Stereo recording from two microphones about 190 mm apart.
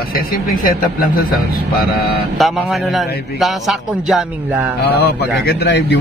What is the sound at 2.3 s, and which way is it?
A man's voice, centre (ahead or behind).